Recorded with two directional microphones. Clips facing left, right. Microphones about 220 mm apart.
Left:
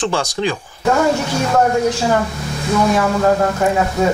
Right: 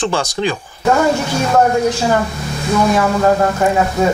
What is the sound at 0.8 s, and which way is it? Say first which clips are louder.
Speech: right 1 dB; 25° right (ahead or behind).